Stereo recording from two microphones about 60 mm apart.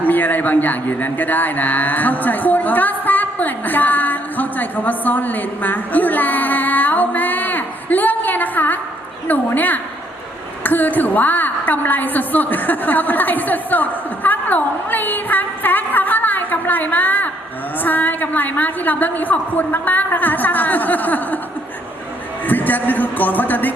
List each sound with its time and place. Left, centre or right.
0.0 s a man's voice: left
22.4 s a man's voice: left